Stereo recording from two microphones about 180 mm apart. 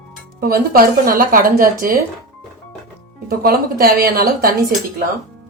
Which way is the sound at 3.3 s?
55° right (ahead or behind).